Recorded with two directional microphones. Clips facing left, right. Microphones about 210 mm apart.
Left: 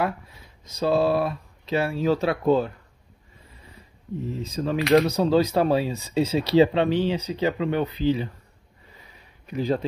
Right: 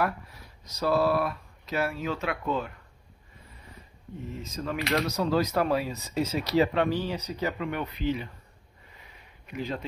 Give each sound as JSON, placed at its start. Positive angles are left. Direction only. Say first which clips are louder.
{"t": 0.7, "sound": "speech", "louder": "left 3 dB", "side_deg": 25}
{"t": 4.3, "sound": "speech", "louder": "left 6 dB", "side_deg": 35}
{"t": 9.5, "sound": "speech", "louder": "left 9 dB", "side_deg": 35}